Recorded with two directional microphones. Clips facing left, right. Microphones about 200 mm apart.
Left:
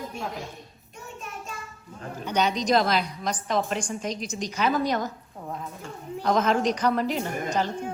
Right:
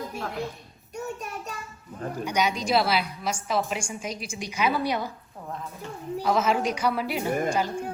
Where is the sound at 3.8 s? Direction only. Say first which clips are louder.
Left 3 dB; 35° left (ahead or behind).